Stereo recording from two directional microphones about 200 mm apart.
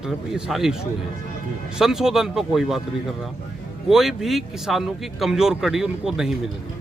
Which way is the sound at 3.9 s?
Centre (ahead or behind).